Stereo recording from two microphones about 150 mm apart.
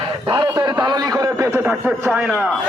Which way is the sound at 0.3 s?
25° right (ahead or behind).